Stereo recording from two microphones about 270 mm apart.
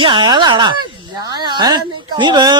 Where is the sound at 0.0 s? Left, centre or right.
Centre.